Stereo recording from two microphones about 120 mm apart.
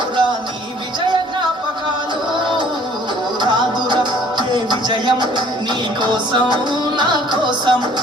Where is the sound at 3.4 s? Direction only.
40° right (ahead or behind).